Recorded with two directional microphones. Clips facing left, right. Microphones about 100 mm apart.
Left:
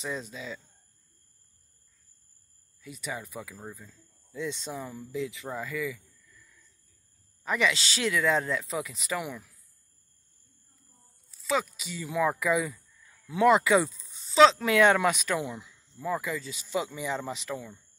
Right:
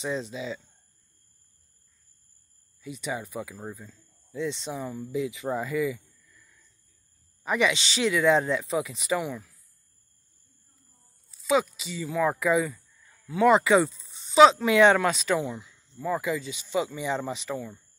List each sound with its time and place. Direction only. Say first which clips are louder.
0.0 s speech: right 5 dB; centre (ahead or behind)
2.8 s speech: right 4 dB; centre (ahead or behind)
5.5 s speech: right 6 dB; 25° right (ahead or behind)
7.4 s speech: right 2 dB; 5° right (ahead or behind)
11.2 s speech: right 5 dB; centre (ahead or behind)